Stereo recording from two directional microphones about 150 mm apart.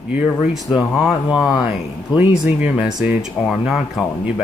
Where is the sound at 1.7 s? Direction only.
10° right (ahead or behind).